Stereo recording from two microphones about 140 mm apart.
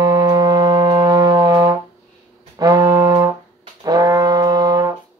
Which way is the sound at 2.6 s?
25° right (ahead or behind).